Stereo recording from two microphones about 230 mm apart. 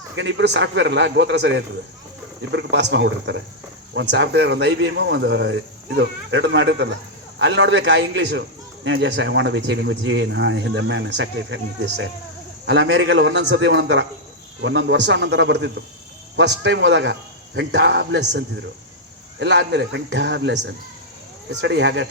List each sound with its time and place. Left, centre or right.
0.2 s a man's voice: right